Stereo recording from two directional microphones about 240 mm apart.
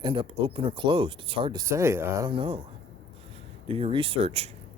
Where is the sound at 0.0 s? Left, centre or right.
Right.